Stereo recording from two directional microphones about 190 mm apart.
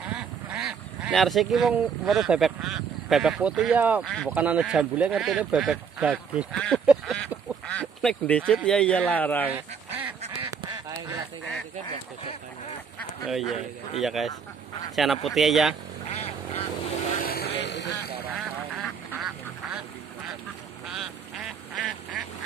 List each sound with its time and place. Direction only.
0.1 s speech: 5° right (ahead or behind)
4.0 s speech: 5° left (ahead or behind)
4.3 s speech: 5° right (ahead or behind)
6.9 s duck: 5° right (ahead or behind)
8.6 s speech: 5° left (ahead or behind)
9.9 s duck: 10° right (ahead or behind)
13.3 s speech: centre (ahead or behind)
16.2 s vehicle: 30° left (ahead or behind)
17.2 s vehicle: 55° left (ahead or behind)
17.6 s a sound: 65° left (ahead or behind)
18.3 s duck: centre (ahead or behind)
20.9 s quack: centre (ahead or behind)